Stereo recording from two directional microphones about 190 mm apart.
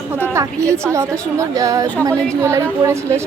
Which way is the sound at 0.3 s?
15° right (ahead or behind).